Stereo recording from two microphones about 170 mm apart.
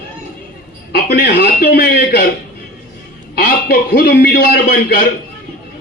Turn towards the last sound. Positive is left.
turn(degrees=55)  # may be behind; listen again after turning